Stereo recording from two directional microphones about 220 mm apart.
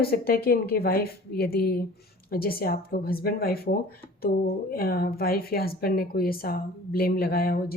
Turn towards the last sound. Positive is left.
turn(degrees=40)  # may be behind; listen again after turning